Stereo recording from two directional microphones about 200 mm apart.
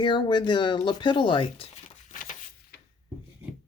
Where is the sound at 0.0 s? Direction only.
25° left (ahead or behind).